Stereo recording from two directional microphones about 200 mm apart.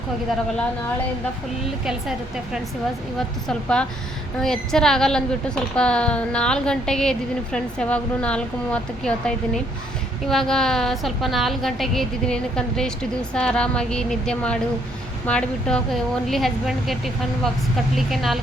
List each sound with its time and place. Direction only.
1.8 s a woman's voice: 5° right (ahead or behind)